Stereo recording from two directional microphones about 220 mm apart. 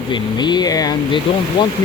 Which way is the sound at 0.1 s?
20° left (ahead or behind).